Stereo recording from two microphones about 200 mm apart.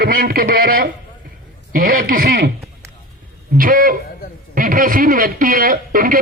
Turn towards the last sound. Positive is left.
turn(degrees=-45)  # may be behind; listen again after turning